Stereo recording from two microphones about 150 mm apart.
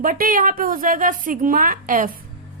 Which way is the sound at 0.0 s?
70° right (ahead or behind).